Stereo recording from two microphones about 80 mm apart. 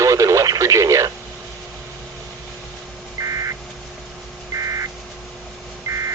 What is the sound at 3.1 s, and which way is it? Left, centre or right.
Vehicle, right.